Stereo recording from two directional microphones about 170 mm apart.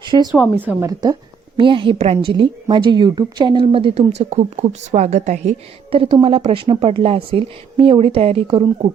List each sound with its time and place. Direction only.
0.0 s a sound: 25° right (ahead or behind)
0.3 s speech: centre (ahead or behind)
0.5 s a woman's voice: 10° right (ahead or behind)
1.5 s a woman's voice: 30° right (ahead or behind)